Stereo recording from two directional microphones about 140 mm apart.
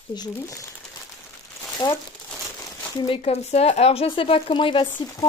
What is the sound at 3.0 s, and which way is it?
Speech, 45° left (ahead or behind).